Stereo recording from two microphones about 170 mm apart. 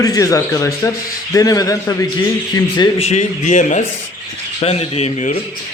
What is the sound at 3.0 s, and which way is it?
Speech, 40° left (ahead or behind).